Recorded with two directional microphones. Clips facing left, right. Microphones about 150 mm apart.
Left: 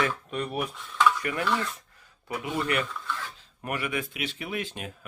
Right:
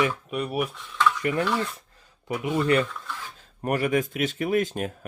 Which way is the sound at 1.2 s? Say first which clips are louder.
Right 3 dB; 30° right (ahead or behind).